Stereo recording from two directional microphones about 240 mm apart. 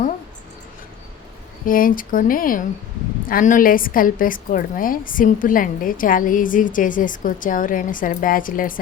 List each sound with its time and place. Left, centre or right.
1.6 s a woman's voice: left